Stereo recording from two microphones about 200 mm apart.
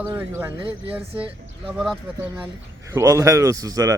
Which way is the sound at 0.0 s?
10° right (ahead or behind).